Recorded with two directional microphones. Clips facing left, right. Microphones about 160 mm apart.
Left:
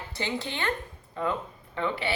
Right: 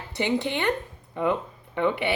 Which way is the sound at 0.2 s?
20° right (ahead or behind).